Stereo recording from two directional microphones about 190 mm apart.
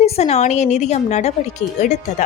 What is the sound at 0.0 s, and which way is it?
A woman's voice, 35° left (ahead or behind).